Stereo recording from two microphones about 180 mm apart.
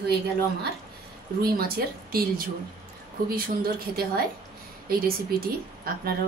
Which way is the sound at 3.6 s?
55° right (ahead or behind).